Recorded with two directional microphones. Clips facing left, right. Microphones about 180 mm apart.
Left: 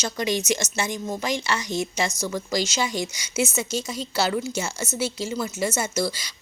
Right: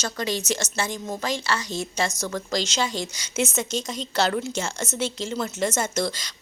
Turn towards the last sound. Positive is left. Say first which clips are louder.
# even
turn(degrees=10)  # may be behind; listen again after turning